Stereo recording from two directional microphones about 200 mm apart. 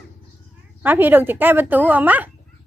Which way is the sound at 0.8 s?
10° right (ahead or behind).